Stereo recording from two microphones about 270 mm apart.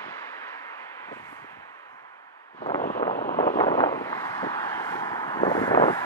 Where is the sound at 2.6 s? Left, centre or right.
Left.